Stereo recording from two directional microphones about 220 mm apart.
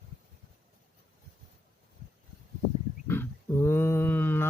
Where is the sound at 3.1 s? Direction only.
10° left (ahead or behind).